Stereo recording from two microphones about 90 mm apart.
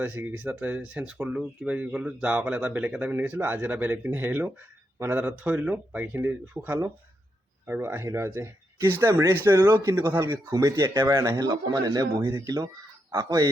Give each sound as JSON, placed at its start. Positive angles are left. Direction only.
{"t": 0.0, "sound": "speech", "side_deg": -20}
{"t": 10.3, "sound": "speech", "side_deg": -40}